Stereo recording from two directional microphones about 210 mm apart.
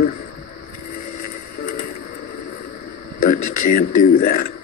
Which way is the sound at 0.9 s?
45° left (ahead or behind).